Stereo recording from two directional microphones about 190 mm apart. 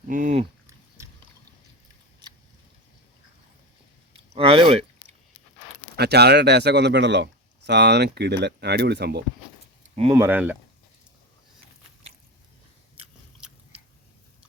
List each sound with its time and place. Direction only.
0.1 s speech: 40° right (ahead or behind)
1.0 s boat: 15° right (ahead or behind)
4.1 s a sound: 25° right (ahead or behind)
6.0 s speech: 60° right (ahead or behind)
10.1 s speech: 10° right (ahead or behind)